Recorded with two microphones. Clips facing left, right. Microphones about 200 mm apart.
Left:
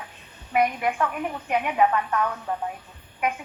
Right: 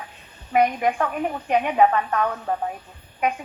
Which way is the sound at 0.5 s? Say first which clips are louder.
Right 3 dB; 35° right (ahead or behind).